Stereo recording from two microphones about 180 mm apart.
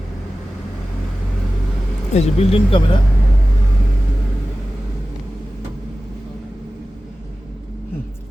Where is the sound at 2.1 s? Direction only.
35° left (ahead or behind).